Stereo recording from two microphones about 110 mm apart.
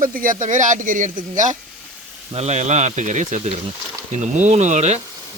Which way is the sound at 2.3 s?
90° right.